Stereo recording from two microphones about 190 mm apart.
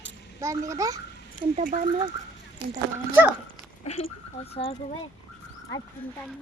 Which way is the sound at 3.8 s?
35° left (ahead or behind).